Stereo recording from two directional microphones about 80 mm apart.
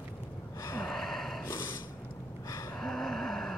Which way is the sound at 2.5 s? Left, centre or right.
Left.